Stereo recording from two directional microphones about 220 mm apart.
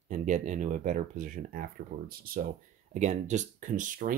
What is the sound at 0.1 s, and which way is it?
Speech, 35° right (ahead or behind).